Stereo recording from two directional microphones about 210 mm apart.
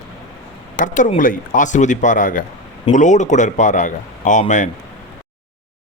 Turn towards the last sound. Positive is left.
turn(degrees=35)  # may be behind; listen again after turning